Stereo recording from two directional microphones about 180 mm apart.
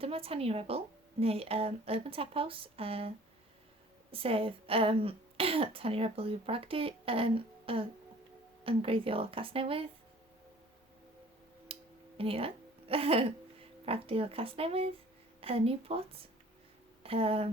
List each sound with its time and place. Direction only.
0.0 s speech: 30° right (ahead or behind)
4.1 s speech: 30° right (ahead or behind)
11.7 s a sound: 30° right (ahead or behind)
12.9 s speech: 30° right (ahead or behind)